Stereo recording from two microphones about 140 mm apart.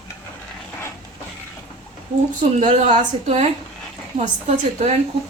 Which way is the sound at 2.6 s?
65° right (ahead or behind).